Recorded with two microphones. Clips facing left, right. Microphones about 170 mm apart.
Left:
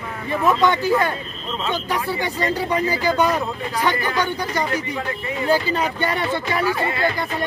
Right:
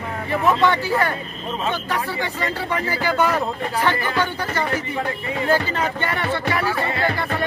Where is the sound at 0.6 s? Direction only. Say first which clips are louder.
Left 1 dB; 15° left (ahead or behind).